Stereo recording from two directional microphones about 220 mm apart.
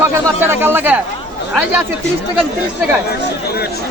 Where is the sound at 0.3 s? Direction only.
10° right (ahead or behind).